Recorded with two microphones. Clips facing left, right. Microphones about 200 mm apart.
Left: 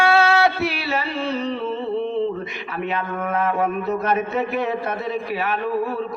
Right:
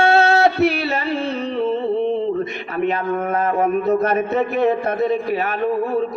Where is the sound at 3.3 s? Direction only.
40° right (ahead or behind).